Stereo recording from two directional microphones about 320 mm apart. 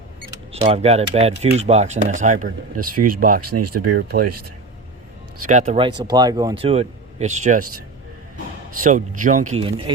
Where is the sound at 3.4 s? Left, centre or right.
Right.